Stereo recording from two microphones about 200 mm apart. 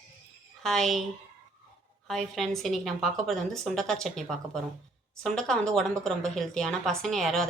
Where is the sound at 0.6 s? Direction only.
Centre (ahead or behind).